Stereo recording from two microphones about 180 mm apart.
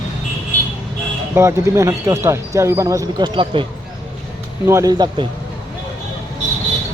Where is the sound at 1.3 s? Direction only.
15° right (ahead or behind).